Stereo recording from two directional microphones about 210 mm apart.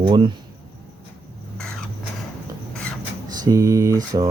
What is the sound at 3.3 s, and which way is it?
Speech, 20° right (ahead or behind).